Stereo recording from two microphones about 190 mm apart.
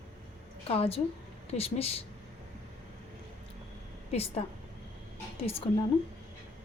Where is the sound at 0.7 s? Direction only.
30° left (ahead or behind).